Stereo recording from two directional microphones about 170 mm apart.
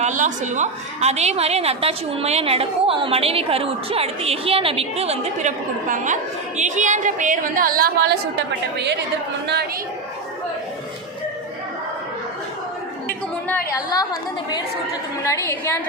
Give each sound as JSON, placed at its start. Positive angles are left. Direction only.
{"t": 0.0, "sound": "a woman's voice", "side_deg": -45}
{"t": 13.5, "sound": "a woman's voice", "side_deg": 20}